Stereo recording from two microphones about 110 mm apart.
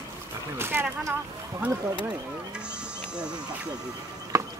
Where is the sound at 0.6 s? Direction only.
20° right (ahead or behind).